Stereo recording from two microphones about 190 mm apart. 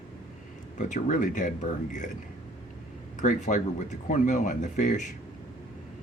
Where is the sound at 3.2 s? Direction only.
40° left (ahead or behind).